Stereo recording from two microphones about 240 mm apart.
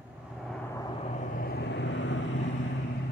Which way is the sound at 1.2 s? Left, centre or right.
Left.